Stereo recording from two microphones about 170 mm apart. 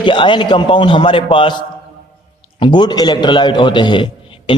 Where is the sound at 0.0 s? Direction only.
30° left (ahead or behind).